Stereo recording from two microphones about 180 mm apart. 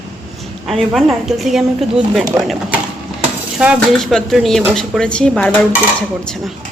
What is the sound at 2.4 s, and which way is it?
Speech, 20° right (ahead or behind).